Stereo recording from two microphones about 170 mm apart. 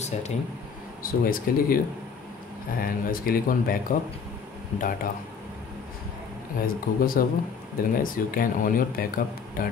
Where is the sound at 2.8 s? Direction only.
60° left (ahead or behind).